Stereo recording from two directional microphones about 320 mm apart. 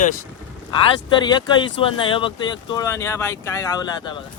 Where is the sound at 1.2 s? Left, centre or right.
Centre.